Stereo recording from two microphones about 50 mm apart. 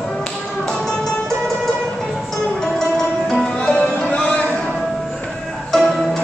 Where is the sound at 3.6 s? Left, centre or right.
Left.